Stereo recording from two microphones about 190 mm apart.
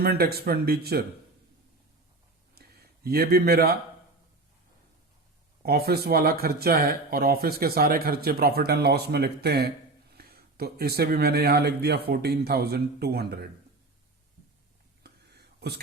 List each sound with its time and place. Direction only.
0.0 s speech: 55° right (ahead or behind)
2.6 s speech: 55° right (ahead or behind)
5.6 s speech: 55° right (ahead or behind)
15.0 s a sound: 60° right (ahead or behind)